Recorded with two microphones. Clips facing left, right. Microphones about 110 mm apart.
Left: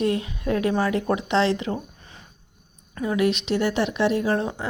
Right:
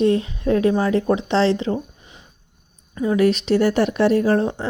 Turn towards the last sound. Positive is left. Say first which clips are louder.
# right 5 dB
turn(degrees=-35)  # may be behind; listen again after turning